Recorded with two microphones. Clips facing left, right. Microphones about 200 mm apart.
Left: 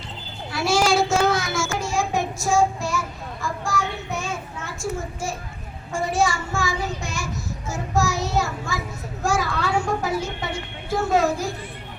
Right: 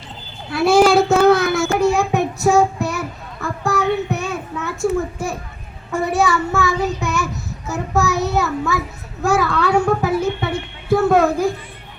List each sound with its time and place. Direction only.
0.5 s child singing: 60° right (ahead or behind)
9.2 s a child's voice: 60° right (ahead or behind)